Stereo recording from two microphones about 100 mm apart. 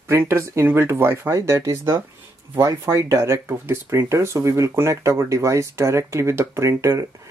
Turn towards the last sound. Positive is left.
turn(degrees=-30)  # may be behind; listen again after turning